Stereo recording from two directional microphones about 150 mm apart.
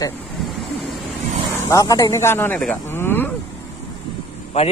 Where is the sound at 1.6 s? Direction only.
20° left (ahead or behind).